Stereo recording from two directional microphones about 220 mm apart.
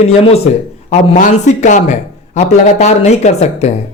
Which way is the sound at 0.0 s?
25° left (ahead or behind).